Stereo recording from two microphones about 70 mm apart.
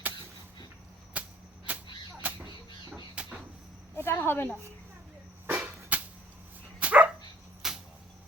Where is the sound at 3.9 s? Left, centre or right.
Left.